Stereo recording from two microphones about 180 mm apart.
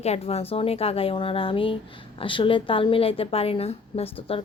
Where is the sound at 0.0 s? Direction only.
35° left (ahead or behind).